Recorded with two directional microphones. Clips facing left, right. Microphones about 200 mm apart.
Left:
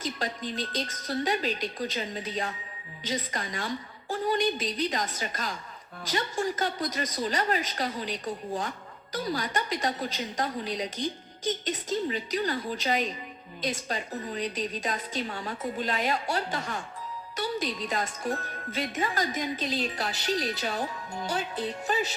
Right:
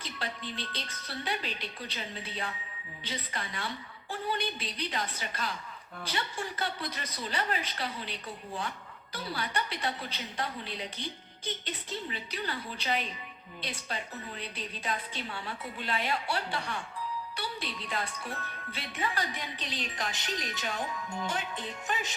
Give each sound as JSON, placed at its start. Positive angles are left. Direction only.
{"t": 0.0, "sound": "a woman's voice", "side_deg": 40}